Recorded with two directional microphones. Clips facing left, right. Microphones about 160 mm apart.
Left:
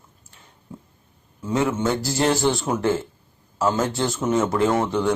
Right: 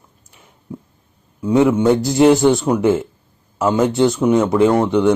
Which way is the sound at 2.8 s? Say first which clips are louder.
Right 6 dB; 20° right (ahead or behind).